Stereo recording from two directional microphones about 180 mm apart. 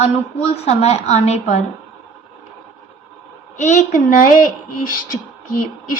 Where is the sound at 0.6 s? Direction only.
35° left (ahead or behind).